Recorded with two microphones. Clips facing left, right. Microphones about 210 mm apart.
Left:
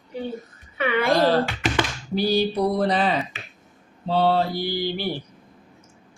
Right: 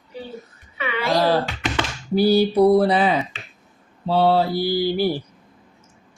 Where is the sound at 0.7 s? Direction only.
55° left (ahead or behind).